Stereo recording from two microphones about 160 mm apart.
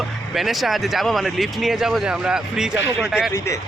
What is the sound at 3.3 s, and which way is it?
Speech, 20° left (ahead or behind).